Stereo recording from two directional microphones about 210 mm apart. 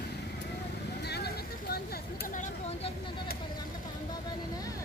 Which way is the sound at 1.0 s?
50° left (ahead or behind).